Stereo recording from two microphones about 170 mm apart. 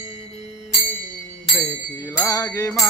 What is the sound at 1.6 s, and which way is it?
Bell, 20° left (ahead or behind).